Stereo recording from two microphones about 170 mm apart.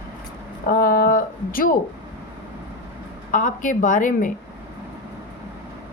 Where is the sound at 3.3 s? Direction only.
50° left (ahead or behind).